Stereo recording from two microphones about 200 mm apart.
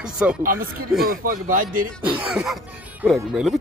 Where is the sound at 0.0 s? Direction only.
5° right (ahead or behind).